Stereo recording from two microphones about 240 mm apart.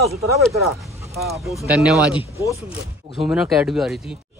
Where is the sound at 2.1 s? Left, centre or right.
Centre.